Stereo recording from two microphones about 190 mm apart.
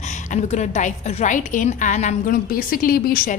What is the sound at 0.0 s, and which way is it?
A woman's voice, 40° left (ahead or behind).